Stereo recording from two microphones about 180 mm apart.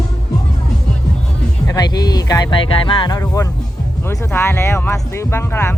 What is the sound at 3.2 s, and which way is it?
Speech, 15° left (ahead or behind).